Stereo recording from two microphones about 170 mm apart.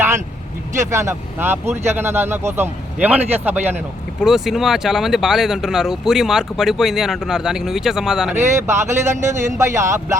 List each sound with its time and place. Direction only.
0.8 s speech: 15° right (ahead or behind)
8.6 s speech: 15° right (ahead or behind)